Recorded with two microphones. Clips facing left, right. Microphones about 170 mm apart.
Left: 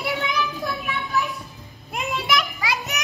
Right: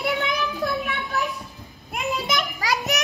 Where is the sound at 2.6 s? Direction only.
40° right (ahead or behind).